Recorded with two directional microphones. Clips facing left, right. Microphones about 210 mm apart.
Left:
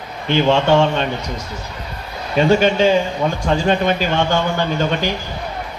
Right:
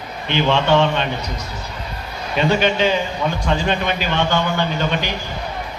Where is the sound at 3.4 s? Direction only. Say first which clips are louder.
Left 5 dB; 40° left (ahead or behind).